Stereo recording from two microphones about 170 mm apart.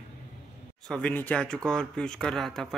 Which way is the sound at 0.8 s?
5° left (ahead or behind).